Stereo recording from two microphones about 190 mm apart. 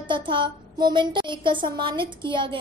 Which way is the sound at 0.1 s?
25° right (ahead or behind).